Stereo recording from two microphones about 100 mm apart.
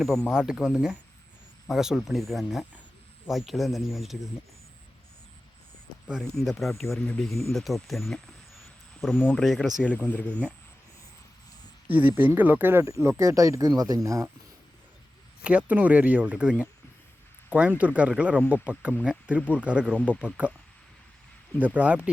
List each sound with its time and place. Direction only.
0.3 s speech: 5° right (ahead or behind)
6.3 s speech: centre (ahead or behind)
7.0 s speech: 10° left (ahead or behind)
7.3 s speech: centre (ahead or behind)
9.3 s speech: 5° left (ahead or behind)
9.8 s speech: 15° left (ahead or behind)
11.9 s speech: 15° right (ahead or behind)
12.8 s speech: 30° right (ahead or behind)
15.4 s speech: 15° right (ahead or behind)
21.6 s speech: 15° right (ahead or behind)